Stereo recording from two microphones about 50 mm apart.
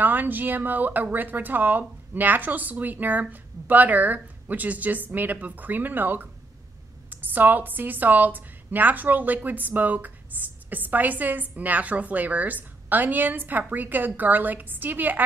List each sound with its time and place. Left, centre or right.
0.0 s a woman's voice: right